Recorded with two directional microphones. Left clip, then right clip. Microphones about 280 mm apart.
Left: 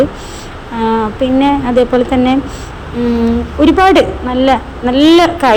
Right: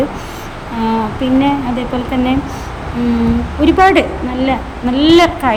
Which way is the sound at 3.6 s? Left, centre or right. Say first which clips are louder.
Left 2 dB; centre.